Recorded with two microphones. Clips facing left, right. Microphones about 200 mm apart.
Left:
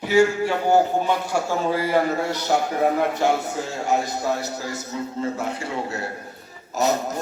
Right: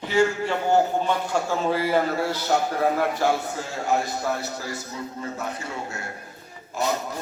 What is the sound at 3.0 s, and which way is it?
Speech, 20° left (ahead or behind).